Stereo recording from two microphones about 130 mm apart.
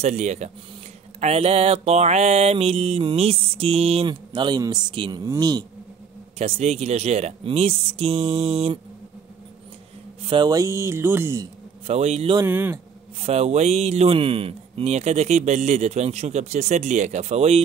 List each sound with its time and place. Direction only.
0.0 s a man's voice: 55° right (ahead or behind)
1.2 s mantra: 50° right (ahead or behind)
5.2 s speech: 30° right (ahead or behind)
6.3 s mantra: 50° right (ahead or behind)
10.2 s speech: 40° right (ahead or behind)
10.5 s a sound: 20° right (ahead or behind)
11.8 s mantra: 55° right (ahead or behind)
12.4 s a man's voice: 15° right (ahead or behind)
13.2 s a man's voice: 55° right (ahead or behind)